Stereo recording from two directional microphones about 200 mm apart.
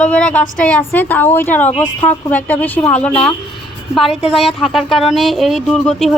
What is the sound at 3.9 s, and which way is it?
Speech, centre (ahead or behind).